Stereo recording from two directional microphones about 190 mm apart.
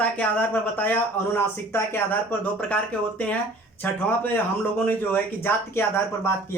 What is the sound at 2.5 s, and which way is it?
Speech, 5° left (ahead or behind).